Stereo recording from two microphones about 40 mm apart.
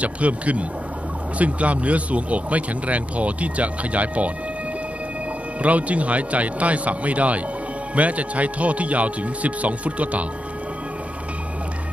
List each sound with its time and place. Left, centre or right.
0.0 s speech: right
5.6 s speech: right